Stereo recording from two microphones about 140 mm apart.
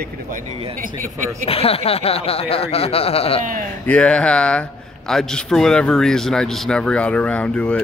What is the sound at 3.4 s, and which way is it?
Speech, 75° right (ahead or behind).